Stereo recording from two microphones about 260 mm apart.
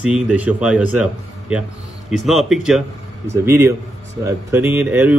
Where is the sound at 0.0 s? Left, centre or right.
Centre.